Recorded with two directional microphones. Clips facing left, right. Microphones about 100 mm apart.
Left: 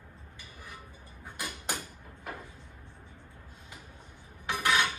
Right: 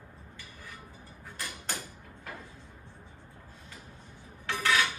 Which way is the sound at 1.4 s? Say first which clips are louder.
Left 2 dB; 10° left (ahead or behind).